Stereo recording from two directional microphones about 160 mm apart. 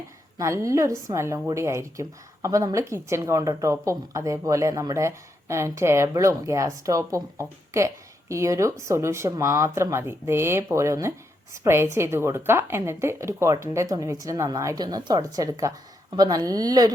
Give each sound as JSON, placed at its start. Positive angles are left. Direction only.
{"t": 0.3, "sound": "a woman's voice", "side_deg": -20}